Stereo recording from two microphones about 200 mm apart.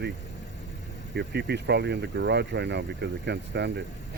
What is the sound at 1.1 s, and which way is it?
Speech, 55° right (ahead or behind).